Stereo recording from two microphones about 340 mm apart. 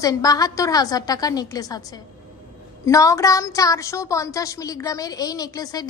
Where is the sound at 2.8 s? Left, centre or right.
Centre.